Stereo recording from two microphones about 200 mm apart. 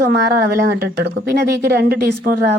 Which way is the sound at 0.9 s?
50° right (ahead or behind).